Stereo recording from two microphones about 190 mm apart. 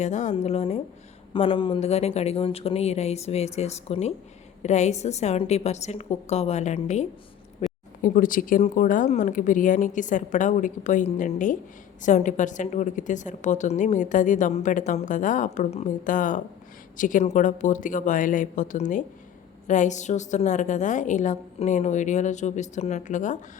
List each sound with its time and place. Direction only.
0.0 s a woman's voice: 40° left (ahead or behind)
7.6 s a sound: 35° left (ahead or behind)
8.0 s a woman's voice: 45° left (ahead or behind)